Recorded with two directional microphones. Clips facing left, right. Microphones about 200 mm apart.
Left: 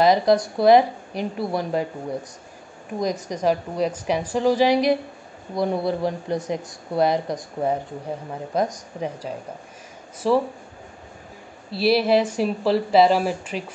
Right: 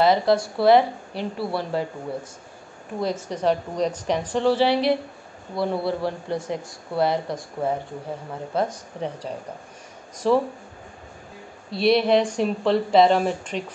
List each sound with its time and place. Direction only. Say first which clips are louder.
0.0 s a woman's voice: left 2 dB; 15° left (ahead or behind)
3.0 s a woman's voice: left 1 dB; 15° left (ahead or behind)
11.7 s speech: even; 5° left (ahead or behind)